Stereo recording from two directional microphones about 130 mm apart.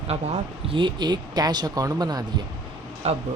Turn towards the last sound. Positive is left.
turn(degrees=-55)  # may be behind; listen again after turning